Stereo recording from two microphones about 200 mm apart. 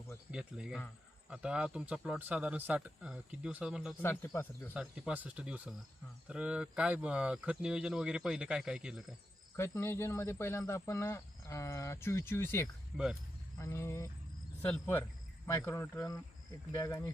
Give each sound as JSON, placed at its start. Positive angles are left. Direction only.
{"t": 0.3, "sound": "speech", "side_deg": -5}
{"t": 4.0, "sound": "speech", "side_deg": 10}
{"t": 4.7, "sound": "speech", "side_deg": -5}
{"t": 9.6, "sound": "speech", "side_deg": 15}
{"t": 12.9, "sound": "speech", "side_deg": -5}
{"t": 13.6, "sound": "speech", "side_deg": 15}